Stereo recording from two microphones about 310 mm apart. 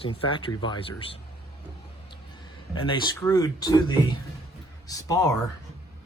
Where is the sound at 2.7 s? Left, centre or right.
Centre.